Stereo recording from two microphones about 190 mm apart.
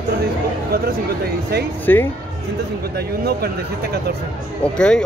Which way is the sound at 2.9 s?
55° right (ahead or behind).